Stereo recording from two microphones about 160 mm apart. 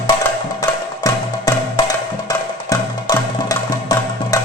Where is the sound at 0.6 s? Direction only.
25° left (ahead or behind).